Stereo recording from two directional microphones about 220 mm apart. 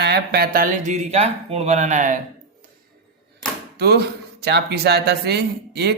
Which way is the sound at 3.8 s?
45° right (ahead or behind).